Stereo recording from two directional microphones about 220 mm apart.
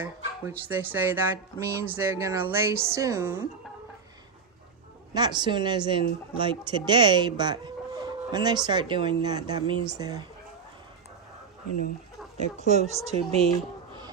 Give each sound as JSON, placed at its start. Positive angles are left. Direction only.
{"t": 0.0, "sound": "speech", "side_deg": -10}
{"t": 5.1, "sound": "speech", "side_deg": -20}
{"t": 12.4, "sound": "speech", "side_deg": -30}